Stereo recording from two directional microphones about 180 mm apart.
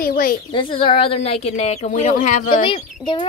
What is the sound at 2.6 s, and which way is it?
Speech, 30° left (ahead or behind).